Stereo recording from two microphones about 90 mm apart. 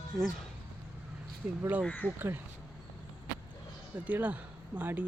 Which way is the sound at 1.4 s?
15° right (ahead or behind).